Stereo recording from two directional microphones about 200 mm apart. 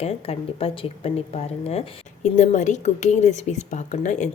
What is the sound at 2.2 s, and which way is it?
Speech, 35° left (ahead or behind).